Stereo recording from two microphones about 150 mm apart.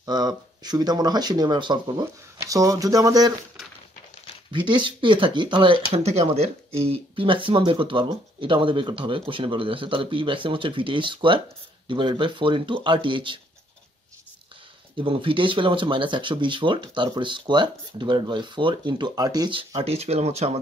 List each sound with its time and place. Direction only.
0.0 s speech: 30° right (ahead or behind)
4.5 s speech: 30° right (ahead or behind)
15.0 s speech: 35° right (ahead or behind)